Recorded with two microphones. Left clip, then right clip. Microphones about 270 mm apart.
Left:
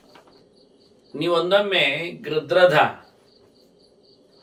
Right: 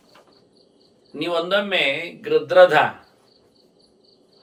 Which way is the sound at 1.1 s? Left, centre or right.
Centre.